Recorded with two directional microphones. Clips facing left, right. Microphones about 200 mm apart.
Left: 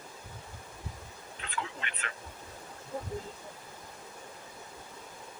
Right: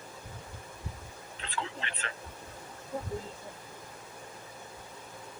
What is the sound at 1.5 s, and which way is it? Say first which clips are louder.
Speech: right 1 dB; 30° right (ahead or behind).